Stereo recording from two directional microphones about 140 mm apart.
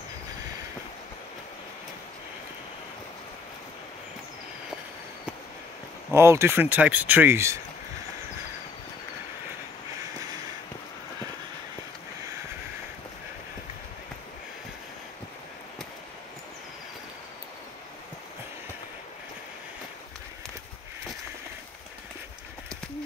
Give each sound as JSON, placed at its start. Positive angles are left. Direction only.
{"t": 6.1, "sound": "speech", "side_deg": -20}